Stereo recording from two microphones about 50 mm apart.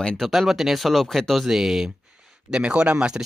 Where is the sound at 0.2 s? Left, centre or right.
Centre.